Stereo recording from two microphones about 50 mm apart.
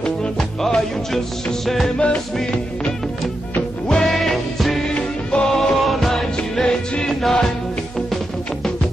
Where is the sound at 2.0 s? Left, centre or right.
Left.